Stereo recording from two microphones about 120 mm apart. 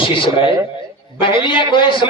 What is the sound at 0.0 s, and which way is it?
A man's voice, 45° left (ahead or behind).